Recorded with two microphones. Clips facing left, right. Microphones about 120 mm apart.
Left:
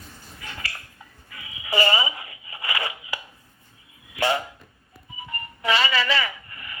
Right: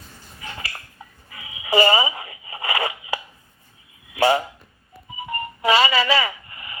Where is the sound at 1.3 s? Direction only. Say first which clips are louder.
Right 6 dB; 25° right (ahead or behind).